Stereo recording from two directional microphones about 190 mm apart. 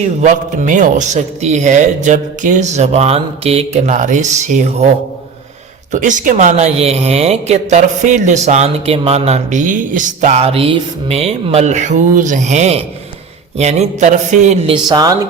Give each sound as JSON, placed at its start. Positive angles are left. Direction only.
{"t": 0.2, "sound": "a woman's voice", "side_deg": -40}
{"t": 5.9, "sound": "a woman's voice", "side_deg": -40}
{"t": 14.8, "sound": "speech", "side_deg": -20}